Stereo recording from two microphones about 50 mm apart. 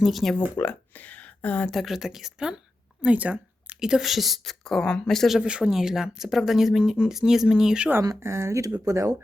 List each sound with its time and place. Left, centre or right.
0.0 s a woman's voice: centre
0.5 s speech: left
1.7 s speech: centre
3.0 s a sound: right
3.8 s a woman's voice: centre
5.4 s speech: centre
8.2 s speech: right